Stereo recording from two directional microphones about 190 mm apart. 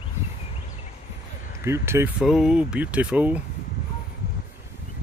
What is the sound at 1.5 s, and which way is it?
Speech, 15° right (ahead or behind).